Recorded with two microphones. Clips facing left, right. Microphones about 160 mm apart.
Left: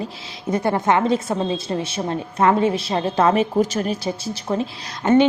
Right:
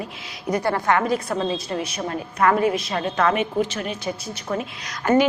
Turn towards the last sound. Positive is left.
turn(degrees=30)  # may be behind; listen again after turning